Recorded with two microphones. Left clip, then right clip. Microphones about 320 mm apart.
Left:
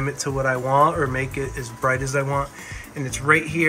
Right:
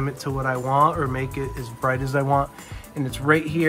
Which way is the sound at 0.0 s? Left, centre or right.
Centre.